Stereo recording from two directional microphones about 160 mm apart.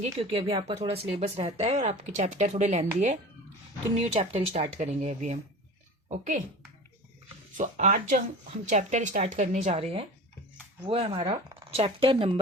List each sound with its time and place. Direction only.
0.0 s speech: 35° right (ahead or behind)
3.9 s speech: 40° right (ahead or behind)
7.5 s speech: 50° right (ahead or behind)